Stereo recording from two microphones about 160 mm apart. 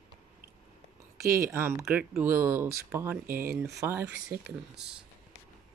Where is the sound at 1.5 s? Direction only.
15° right (ahead or behind).